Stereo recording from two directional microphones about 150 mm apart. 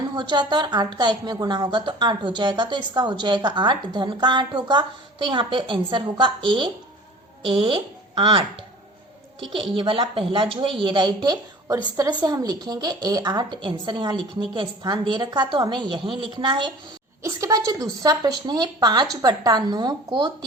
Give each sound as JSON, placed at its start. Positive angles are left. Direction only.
{"t": 0.2, "sound": "a woman's voice", "side_deg": -30}
{"t": 9.7, "sound": "a woman's voice", "side_deg": -35}
{"t": 17.2, "sound": "a sound", "side_deg": -20}
{"t": 18.0, "sound": "speech", "side_deg": -25}